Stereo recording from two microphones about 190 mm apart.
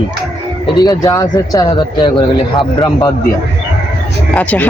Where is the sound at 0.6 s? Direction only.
20° left (ahead or behind).